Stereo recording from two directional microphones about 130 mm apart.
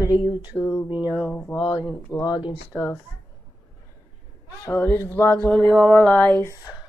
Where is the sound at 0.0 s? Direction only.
30° left (ahead or behind).